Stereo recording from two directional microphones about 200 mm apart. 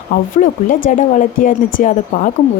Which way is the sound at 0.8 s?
40° left (ahead or behind).